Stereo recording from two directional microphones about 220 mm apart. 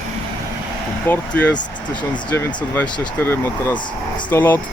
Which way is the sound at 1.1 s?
5° left (ahead or behind).